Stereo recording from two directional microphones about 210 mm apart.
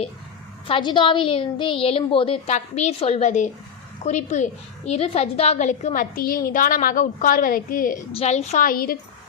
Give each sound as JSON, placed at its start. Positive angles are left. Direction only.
{"t": 0.7, "sound": "a woman's voice", "side_deg": 20}